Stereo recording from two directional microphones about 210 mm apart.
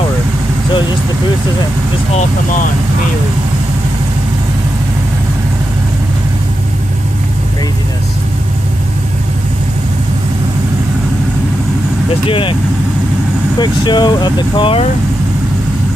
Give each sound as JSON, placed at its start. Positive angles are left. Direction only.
{"t": 12.3, "sound": "speech", "side_deg": 25}
{"t": 13.6, "sound": "speech", "side_deg": 20}